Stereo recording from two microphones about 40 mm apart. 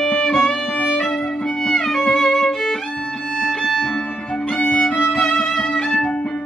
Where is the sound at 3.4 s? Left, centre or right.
Centre.